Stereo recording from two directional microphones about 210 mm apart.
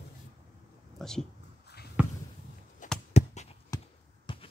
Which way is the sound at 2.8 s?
35° left (ahead or behind).